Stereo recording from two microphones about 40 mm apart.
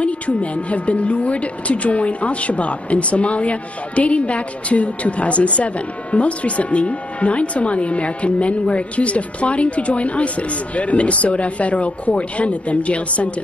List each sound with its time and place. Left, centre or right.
0.0 s speech: left